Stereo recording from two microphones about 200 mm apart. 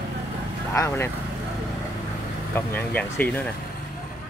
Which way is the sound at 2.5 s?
10° left (ahead or behind).